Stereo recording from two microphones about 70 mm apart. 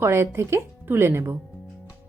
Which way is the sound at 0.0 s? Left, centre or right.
Right.